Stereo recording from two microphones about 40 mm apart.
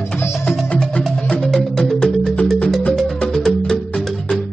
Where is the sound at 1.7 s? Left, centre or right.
Centre.